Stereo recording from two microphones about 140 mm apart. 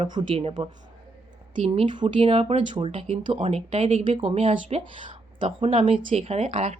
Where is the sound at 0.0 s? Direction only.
35° right (ahead or behind).